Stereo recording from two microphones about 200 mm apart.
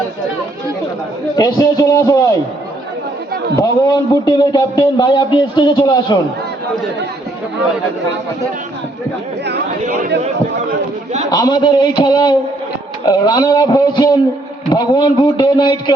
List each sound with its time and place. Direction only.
1.4 s a man's voice: 20° left (ahead or behind)
3.5 s a man's voice: 15° left (ahead or behind)
9.8 s speech: 40° right (ahead or behind)
11.3 s a man's voice: 20° left (ahead or behind)